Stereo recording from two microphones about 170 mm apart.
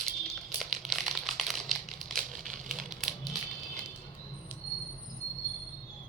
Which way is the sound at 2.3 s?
50° right (ahead or behind).